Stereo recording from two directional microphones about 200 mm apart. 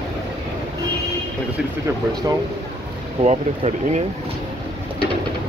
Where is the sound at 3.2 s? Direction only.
35° right (ahead or behind).